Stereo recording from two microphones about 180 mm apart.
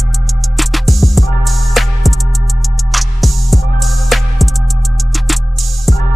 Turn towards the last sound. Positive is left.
turn(degrees=0)  # may be behind; listen again after turning